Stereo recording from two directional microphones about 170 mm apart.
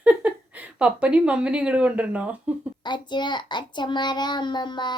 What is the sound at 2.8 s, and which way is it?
A child's voice, 25° left (ahead or behind).